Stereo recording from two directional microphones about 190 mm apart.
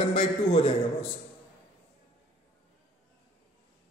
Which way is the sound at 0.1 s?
30° left (ahead or behind).